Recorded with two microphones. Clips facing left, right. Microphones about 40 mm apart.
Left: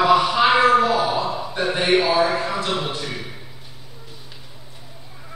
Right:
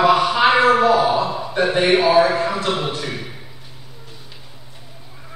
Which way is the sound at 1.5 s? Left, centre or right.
Centre.